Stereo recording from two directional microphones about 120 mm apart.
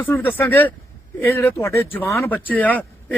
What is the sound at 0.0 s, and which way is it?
Speech, 15° left (ahead or behind).